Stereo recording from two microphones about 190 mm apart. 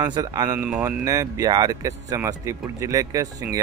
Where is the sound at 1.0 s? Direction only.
15° right (ahead or behind).